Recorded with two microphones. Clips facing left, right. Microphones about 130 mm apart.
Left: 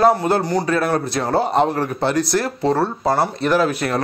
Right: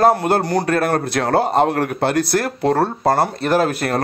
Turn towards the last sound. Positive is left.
turn(degrees=-50)  # may be behind; listen again after turning